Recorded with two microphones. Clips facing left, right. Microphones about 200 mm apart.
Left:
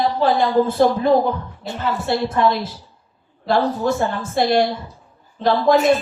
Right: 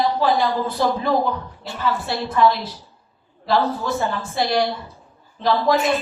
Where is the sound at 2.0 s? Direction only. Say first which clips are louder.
Left 1 dB; 50° left (ahead or behind).